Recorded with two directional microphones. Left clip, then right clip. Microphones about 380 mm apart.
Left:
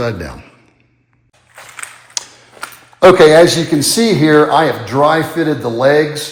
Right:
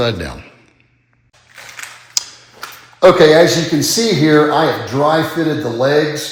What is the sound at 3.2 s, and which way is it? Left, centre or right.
A man's voice, centre.